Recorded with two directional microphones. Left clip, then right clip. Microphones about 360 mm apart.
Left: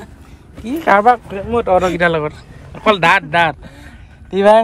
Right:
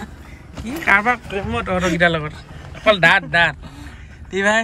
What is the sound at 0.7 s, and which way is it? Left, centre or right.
A man's voice, centre.